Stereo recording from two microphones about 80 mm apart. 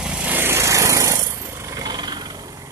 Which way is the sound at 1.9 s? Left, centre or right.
Right.